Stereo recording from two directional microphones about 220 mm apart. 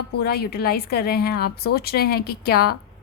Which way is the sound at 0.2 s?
45° left (ahead or behind).